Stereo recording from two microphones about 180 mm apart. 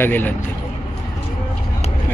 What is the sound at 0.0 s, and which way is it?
Speech, 10° left (ahead or behind).